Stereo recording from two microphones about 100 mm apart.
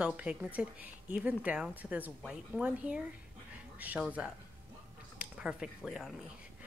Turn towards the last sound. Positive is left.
turn(degrees=0)  # may be behind; listen again after turning